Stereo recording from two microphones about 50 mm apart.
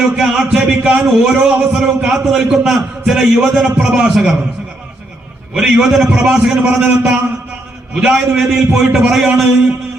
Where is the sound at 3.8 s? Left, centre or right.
Centre.